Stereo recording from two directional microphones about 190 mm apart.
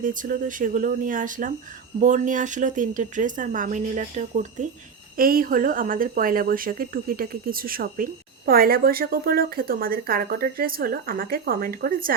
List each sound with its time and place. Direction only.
0.0 s a woman's voice: 45° right (ahead or behind)